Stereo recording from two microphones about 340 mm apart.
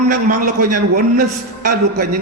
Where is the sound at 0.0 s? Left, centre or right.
Right.